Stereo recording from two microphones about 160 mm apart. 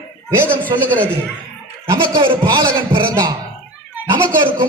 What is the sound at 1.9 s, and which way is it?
A man's voice, 30° right (ahead or behind).